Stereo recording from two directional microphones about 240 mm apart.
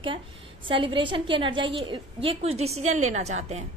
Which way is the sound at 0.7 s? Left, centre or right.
Right.